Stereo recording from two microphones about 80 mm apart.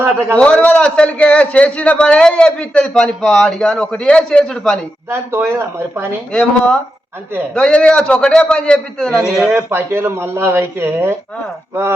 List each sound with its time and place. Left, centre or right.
0.3 s a man's voice: centre
5.0 s speech: right
6.3 s a man's voice: centre
9.5 s speech: right